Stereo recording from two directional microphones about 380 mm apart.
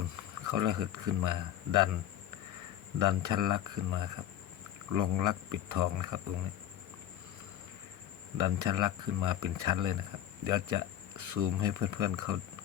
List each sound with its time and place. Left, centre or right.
0.3 s speech: right
3.0 s speech: right
8.4 s speech: right